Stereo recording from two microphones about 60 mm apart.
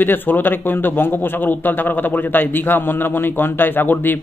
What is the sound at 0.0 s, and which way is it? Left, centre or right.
A man's voice, left.